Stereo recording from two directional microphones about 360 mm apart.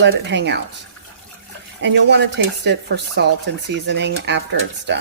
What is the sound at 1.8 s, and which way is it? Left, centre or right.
Speech, right.